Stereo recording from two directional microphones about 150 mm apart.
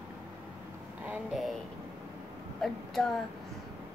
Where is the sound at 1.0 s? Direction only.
5° right (ahead or behind).